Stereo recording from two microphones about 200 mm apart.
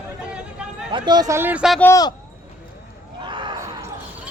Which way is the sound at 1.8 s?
15° left (ahead or behind).